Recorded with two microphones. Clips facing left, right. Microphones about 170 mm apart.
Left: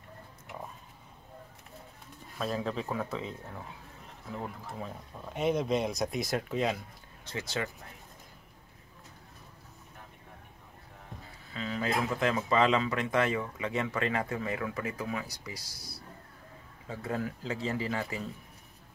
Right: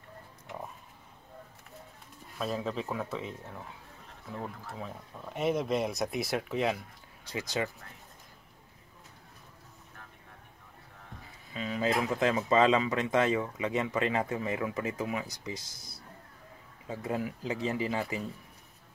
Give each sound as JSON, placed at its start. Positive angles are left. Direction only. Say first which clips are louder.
{"t": 2.3, "sound": "speech", "louder": "even", "side_deg": 0}
{"t": 4.3, "sound": "speech", "louder": "left 1 dB", "side_deg": 5}
{"t": 7.2, "sound": "speech", "louder": "right 2 dB", "side_deg": -15}
{"t": 11.5, "sound": "speech", "louder": "right 2 dB", "side_deg": -15}